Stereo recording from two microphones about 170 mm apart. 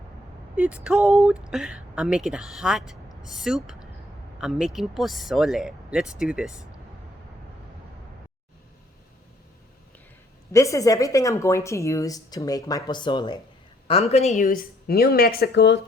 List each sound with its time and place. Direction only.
0.5 s speech: 10° right (ahead or behind)
10.5 s speech: 20° left (ahead or behind)
13.8 s speech: 35° left (ahead or behind); by 15.8 s 85° left